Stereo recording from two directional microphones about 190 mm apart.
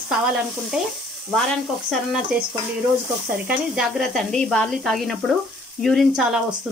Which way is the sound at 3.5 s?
Centre (ahead or behind).